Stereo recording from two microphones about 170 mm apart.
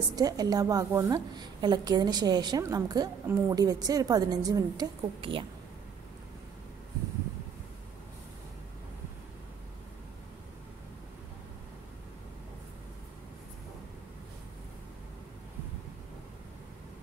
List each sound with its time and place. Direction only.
0.1 s a woman's voice: 20° right (ahead or behind)